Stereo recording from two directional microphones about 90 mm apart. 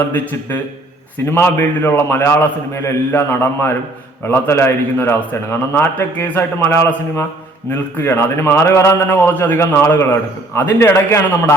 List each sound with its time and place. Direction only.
1.3 s a man's voice: 25° left (ahead or behind)